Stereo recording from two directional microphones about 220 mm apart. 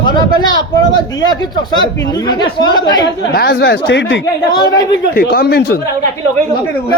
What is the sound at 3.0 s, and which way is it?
A man's voice, 45° left (ahead or behind).